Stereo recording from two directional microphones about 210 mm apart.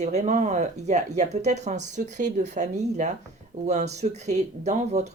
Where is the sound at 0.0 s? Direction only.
30° right (ahead or behind).